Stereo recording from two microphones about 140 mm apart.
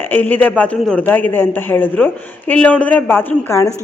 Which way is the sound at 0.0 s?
10° left (ahead or behind).